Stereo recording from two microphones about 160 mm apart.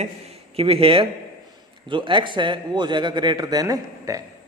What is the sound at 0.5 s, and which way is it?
A man's voice, 35° right (ahead or behind).